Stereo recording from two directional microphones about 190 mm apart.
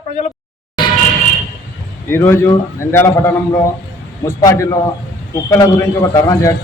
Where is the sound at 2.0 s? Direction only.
10° left (ahead or behind).